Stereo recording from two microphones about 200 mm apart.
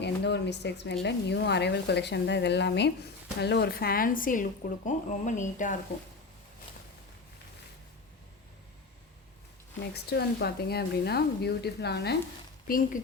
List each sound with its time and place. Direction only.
0.0 s speech: 60° left (ahead or behind); by 5.7 s 40° left (ahead or behind)
9.9 s speech: 55° left (ahead or behind)
12.6 s speech: 45° left (ahead or behind)